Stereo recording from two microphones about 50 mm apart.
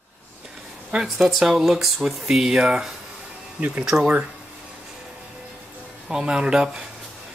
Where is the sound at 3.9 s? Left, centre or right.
Right.